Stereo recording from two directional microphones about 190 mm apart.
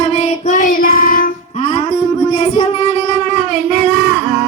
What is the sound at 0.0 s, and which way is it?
Child singing, 40° left (ahead or behind).